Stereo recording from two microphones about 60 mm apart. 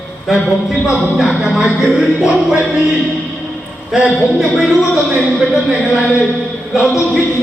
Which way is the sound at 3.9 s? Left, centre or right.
Centre.